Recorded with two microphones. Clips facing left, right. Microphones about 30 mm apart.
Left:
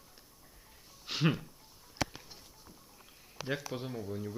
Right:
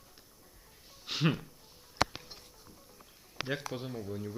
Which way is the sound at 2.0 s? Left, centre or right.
Right.